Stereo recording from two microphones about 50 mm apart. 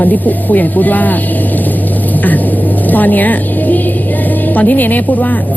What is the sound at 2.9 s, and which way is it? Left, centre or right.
A woman's voice, left.